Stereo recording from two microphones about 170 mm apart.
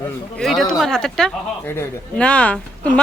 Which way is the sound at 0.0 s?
5° left (ahead or behind).